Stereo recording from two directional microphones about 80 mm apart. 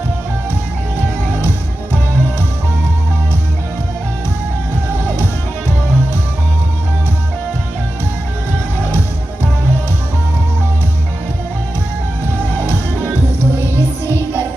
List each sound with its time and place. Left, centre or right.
1.4 s music: right
5.0 s music: right
8.9 s music: right
12.5 s music: right
14.1 s music: left